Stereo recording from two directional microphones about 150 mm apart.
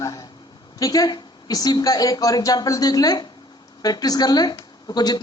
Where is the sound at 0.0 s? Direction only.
20° left (ahead or behind).